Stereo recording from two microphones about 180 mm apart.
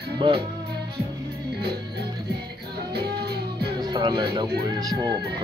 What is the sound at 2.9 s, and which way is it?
Music, 65° right (ahead or behind).